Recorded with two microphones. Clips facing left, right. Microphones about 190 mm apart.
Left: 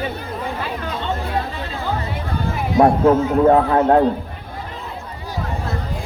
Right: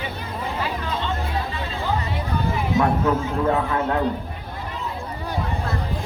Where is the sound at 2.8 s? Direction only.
40° left (ahead or behind).